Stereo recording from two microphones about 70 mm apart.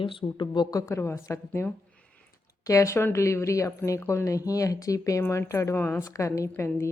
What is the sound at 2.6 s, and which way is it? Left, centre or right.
Speech, left.